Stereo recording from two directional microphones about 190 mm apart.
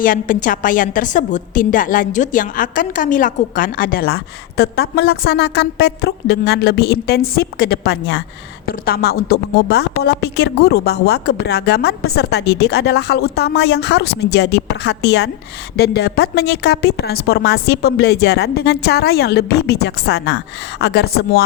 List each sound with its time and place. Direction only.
0.0 s a woman's voice: 45° left (ahead or behind)